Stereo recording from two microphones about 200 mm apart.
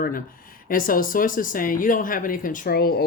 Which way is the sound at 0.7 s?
45° left (ahead or behind).